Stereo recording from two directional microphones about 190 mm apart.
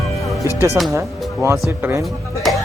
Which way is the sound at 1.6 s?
10° right (ahead or behind).